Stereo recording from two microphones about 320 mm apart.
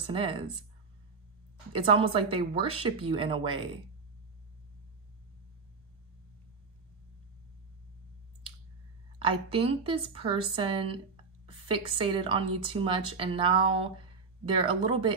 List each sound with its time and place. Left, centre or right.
0.0 s speech: centre
1.7 s speech: centre
9.2 s speech: centre